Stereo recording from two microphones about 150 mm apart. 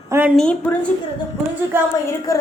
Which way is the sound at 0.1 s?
10° right (ahead or behind).